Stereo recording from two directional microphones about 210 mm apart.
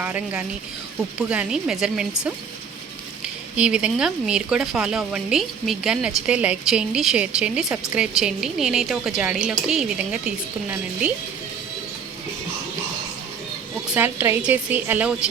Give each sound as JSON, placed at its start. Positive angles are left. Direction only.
{"t": 0.0, "sound": "a woman's voice", "side_deg": -5}
{"t": 3.5, "sound": "speech", "side_deg": -5}
{"t": 13.9, "sound": "a woman's voice", "side_deg": -10}